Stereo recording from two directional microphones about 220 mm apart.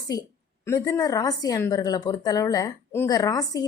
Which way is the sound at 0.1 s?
15° left (ahead or behind).